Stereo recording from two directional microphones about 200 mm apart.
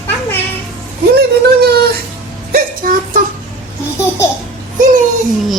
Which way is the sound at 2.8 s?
45° right (ahead or behind).